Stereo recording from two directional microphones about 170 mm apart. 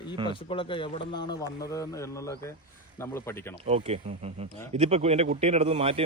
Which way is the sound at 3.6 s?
35° right (ahead or behind).